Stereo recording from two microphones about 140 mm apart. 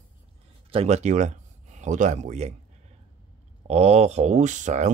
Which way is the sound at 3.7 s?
50° right (ahead or behind).